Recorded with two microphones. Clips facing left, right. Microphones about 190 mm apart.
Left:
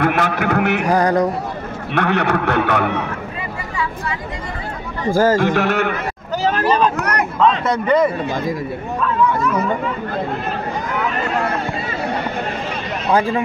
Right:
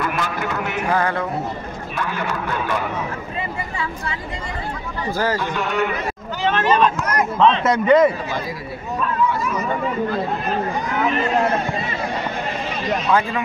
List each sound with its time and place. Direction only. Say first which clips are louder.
0.0 s a man's voice: left 6 dB; 70° left (ahead or behind)
0.8 s speech: left 4 dB; 40° left (ahead or behind)
2.0 s a man's voice: left 8 dB; 70° left (ahead or behind)
5.1 s a man's voice: left 8 dB; 50° left (ahead or behind)
5.4 s a man's voice: left 5 dB; 75° left (ahead or behind)
6.3 s a sound: left 2 dB; 40° left (ahead or behind)
7.0 s a man's voice: left 1 dB; 70° left (ahead or behind)
7.6 s a man's voice: right 2 dB; centre (ahead or behind)